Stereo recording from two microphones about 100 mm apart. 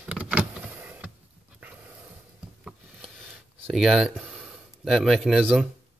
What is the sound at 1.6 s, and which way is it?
Dog, 20° right (ahead or behind).